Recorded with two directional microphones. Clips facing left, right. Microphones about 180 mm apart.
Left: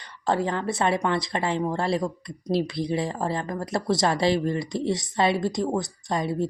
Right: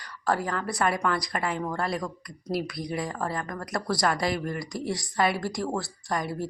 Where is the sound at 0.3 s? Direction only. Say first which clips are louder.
Left 3 dB; 25° left (ahead or behind).